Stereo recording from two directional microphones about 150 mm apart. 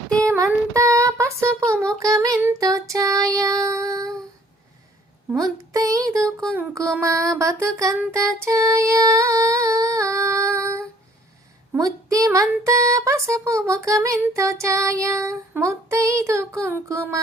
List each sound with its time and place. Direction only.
0.3 s child singing: 20° right (ahead or behind)
5.4 s child singing: 25° right (ahead or behind)